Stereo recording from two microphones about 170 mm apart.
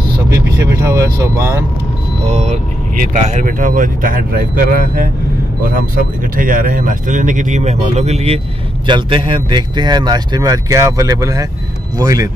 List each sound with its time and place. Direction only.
0.3 s speech: 20° right (ahead or behind)
2.2 s speech: 40° right (ahead or behind)
8.8 s speech: 30° right (ahead or behind)